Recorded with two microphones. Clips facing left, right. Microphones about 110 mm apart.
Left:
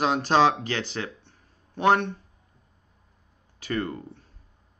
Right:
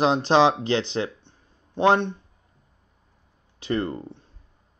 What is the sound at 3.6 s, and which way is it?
Speech, 25° right (ahead or behind).